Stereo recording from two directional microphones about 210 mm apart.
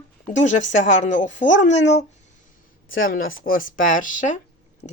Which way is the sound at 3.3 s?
40° left (ahead or behind).